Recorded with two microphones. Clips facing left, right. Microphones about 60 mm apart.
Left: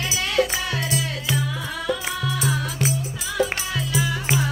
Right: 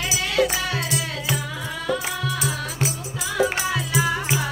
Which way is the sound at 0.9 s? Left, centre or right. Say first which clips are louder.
Left 1 dB; right.